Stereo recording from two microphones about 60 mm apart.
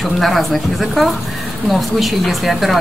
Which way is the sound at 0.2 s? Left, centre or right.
Centre.